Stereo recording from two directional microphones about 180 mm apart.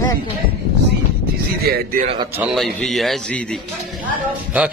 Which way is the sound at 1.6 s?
60° right (ahead or behind).